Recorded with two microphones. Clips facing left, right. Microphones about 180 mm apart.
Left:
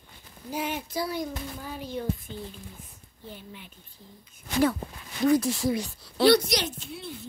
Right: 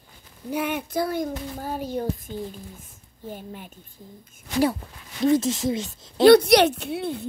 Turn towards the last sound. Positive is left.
turn(degrees=-65)  # may be behind; listen again after turning